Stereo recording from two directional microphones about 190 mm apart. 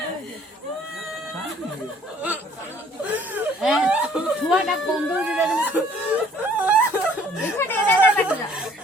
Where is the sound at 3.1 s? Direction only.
5° right (ahead or behind).